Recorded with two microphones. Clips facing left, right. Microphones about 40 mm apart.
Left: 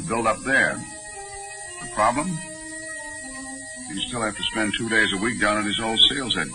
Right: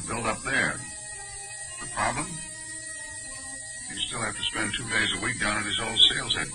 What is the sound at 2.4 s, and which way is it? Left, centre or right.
Music, centre.